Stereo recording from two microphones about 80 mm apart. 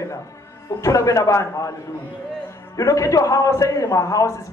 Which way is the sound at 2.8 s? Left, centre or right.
Left.